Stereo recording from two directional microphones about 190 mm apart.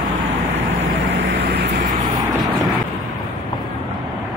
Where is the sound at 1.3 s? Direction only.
60° right (ahead or behind).